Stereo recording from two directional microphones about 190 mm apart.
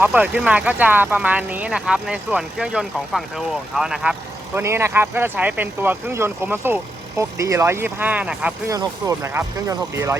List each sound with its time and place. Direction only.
0.0 s speech: 5° right (ahead or behind)
8.7 s speech: 20° right (ahead or behind)